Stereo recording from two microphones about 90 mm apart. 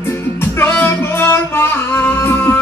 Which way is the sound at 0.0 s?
25° left (ahead or behind).